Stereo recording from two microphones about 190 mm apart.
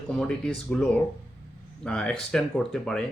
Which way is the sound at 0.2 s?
5° left (ahead or behind).